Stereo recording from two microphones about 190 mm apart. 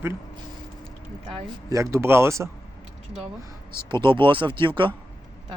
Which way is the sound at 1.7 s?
15° right (ahead or behind).